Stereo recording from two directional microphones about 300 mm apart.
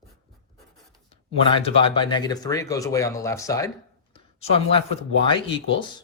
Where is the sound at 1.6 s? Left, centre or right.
Centre.